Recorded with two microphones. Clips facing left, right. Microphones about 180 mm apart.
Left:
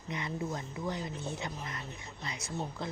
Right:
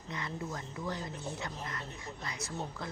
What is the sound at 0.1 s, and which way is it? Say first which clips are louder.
Speech: left 3 dB; 20° left (ahead or behind).